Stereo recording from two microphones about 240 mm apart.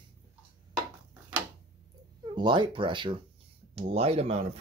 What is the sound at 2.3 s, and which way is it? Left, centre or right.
Speech, centre.